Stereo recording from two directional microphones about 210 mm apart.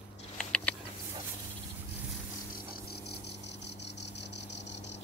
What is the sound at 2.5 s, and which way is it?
Cricket, 45° left (ahead or behind).